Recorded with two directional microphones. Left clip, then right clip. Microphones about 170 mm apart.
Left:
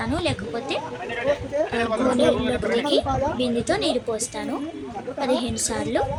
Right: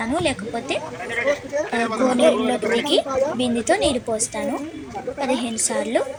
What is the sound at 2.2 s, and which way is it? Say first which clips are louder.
A woman's voice: right 3 dB; 10° right (ahead or behind).